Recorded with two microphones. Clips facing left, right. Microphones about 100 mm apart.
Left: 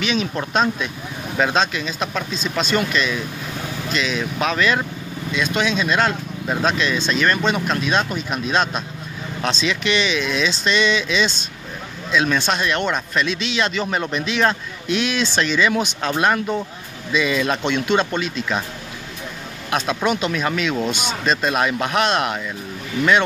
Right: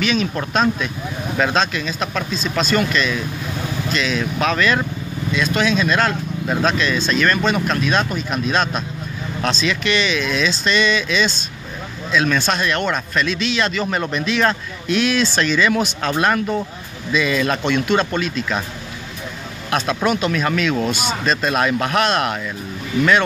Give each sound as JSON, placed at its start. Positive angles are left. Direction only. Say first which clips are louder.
{"t": 0.0, "sound": "speech", "louder": "right 2 dB", "side_deg": 20}
{"t": 19.7, "sound": "speech", "louder": "right 1 dB", "side_deg": 15}